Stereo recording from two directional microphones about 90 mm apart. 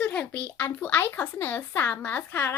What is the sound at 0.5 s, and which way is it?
A child's voice, 20° left (ahead or behind).